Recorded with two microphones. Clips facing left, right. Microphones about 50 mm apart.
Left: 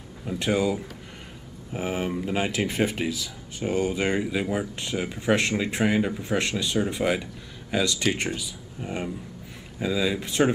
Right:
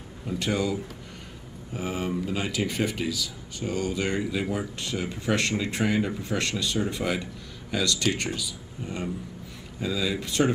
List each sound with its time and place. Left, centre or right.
0.4 s speech: centre